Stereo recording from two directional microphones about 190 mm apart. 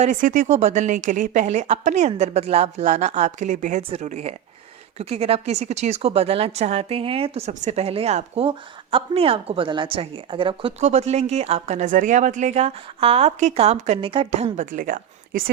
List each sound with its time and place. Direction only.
0.0 s a woman's voice: 45° right (ahead or behind)